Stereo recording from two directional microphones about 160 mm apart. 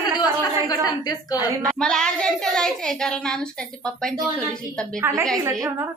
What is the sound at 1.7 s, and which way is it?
A woman's voice, 5° left (ahead or behind).